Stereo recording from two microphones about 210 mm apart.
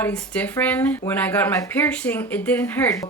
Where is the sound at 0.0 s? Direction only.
5° left (ahead or behind).